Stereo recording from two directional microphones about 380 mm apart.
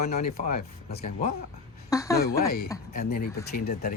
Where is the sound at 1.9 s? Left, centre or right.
Centre.